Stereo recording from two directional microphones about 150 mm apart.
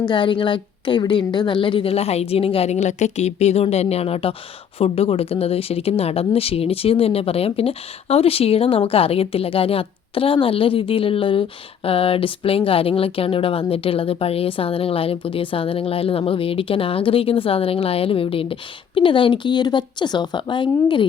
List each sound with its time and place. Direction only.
0.0 s speech: 30° left (ahead or behind)